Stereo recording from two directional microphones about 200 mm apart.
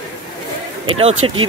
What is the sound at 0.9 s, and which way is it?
Speech, 30° right (ahead or behind).